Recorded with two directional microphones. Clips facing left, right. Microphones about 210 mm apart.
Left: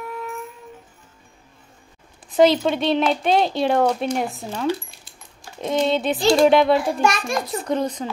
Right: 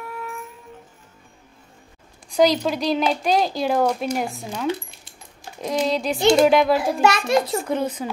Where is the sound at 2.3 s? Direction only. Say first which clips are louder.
Left 2 dB; centre (ahead or behind).